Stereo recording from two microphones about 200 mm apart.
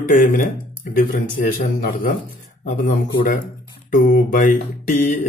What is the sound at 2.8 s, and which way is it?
Speech, 40° left (ahead or behind).